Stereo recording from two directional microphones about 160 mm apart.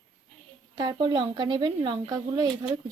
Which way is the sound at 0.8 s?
30° right (ahead or behind).